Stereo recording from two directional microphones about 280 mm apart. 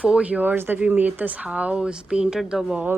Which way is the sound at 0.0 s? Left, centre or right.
Centre.